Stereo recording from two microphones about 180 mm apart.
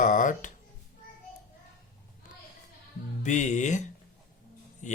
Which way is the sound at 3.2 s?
40° left (ahead or behind).